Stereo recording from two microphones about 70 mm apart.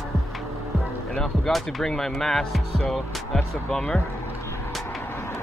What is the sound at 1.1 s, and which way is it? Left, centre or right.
Speech, centre.